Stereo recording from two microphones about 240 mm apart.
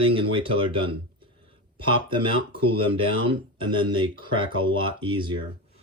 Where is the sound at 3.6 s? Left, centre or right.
Centre.